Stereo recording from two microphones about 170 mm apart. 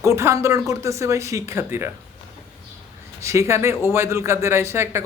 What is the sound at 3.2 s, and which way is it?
Speech, 15° right (ahead or behind).